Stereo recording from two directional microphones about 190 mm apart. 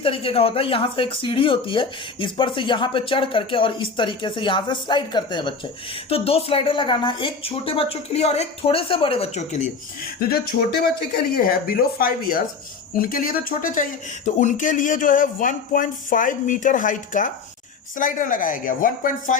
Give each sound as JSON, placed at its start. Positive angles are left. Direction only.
{"t": 0.0, "sound": "speech", "side_deg": 30}